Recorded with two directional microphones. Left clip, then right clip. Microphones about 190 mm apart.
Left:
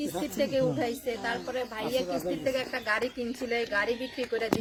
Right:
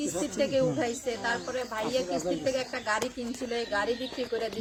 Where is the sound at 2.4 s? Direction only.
Centre (ahead or behind).